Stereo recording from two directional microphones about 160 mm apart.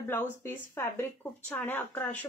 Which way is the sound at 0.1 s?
15° left (ahead or behind).